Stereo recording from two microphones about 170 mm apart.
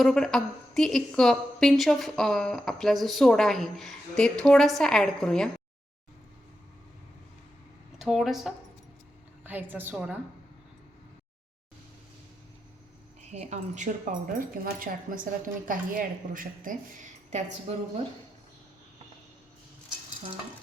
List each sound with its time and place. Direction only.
0.0 s a woman's voice: 5° left (ahead or behind)
7.9 s a woman's voice: centre (ahead or behind)
13.3 s speech: 45° right (ahead or behind)